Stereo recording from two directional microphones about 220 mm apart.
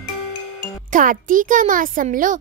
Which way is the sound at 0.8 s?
35° right (ahead or behind).